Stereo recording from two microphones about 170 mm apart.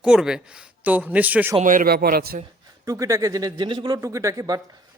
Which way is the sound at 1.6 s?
55° right (ahead or behind).